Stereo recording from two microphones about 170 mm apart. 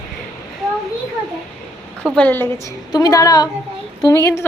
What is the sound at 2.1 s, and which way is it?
A woman's voice, 10° left (ahead or behind).